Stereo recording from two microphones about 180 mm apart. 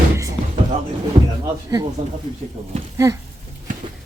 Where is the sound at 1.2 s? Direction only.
30° right (ahead or behind).